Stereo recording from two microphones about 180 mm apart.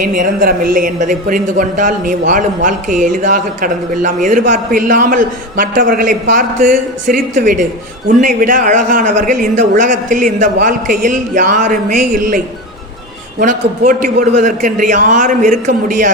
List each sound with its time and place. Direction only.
0.0 s a woman's voice: 45° right (ahead or behind)
13.4 s a woman's voice: 50° right (ahead or behind)